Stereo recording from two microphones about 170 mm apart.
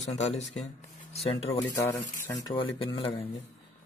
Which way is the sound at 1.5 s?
20° left (ahead or behind).